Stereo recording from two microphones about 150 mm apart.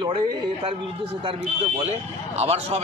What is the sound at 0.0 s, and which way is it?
Speech, 30° right (ahead or behind).